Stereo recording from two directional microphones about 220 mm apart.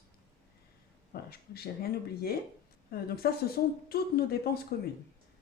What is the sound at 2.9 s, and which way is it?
Speech, 45° left (ahead or behind).